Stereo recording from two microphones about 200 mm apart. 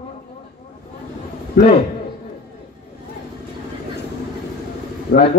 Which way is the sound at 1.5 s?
55° left (ahead or behind).